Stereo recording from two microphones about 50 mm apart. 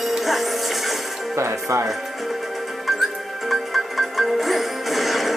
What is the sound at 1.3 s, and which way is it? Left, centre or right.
Speech, right.